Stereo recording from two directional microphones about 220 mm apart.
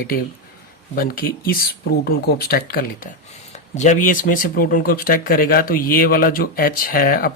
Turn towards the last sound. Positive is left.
turn(degrees=40)  # may be behind; listen again after turning